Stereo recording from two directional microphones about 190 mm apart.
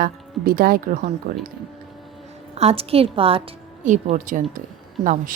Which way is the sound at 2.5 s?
30° right (ahead or behind).